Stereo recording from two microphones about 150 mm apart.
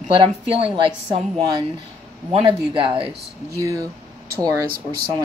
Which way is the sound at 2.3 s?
40° right (ahead or behind).